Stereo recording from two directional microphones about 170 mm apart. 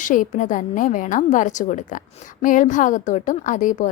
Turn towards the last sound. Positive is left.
turn(degrees=45)  # may be behind; listen again after turning